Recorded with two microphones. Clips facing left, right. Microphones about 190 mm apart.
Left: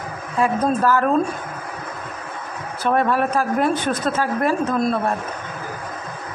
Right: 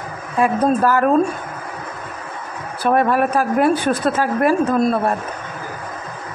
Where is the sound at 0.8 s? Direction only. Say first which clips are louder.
Right 2 dB; 10° right (ahead or behind).